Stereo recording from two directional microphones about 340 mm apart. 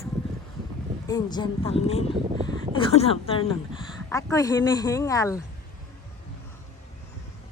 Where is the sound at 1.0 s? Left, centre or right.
Centre.